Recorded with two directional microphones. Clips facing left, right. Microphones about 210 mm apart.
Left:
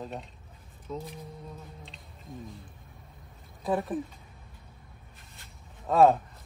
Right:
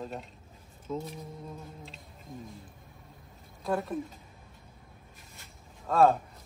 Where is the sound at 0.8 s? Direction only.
Centre (ahead or behind).